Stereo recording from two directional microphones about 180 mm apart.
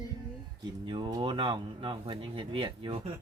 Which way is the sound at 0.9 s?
25° right (ahead or behind).